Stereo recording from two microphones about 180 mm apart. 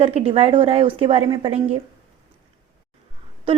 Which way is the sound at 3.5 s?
30° right (ahead or behind).